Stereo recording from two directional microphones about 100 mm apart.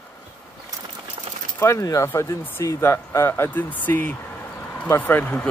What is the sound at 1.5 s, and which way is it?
Speech, 25° left (ahead or behind).